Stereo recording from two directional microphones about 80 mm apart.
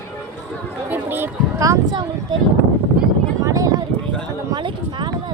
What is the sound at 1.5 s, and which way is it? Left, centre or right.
Speech, right.